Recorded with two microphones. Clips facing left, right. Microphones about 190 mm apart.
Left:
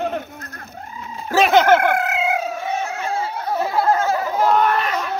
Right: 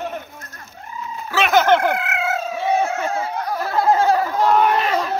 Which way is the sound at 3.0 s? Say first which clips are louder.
Right 1 dB; 30° left (ahead or behind).